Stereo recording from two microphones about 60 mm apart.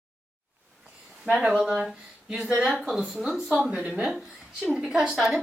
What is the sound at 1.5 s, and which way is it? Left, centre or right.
A woman's voice, centre.